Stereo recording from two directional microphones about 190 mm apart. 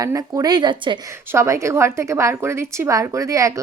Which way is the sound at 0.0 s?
20° right (ahead or behind).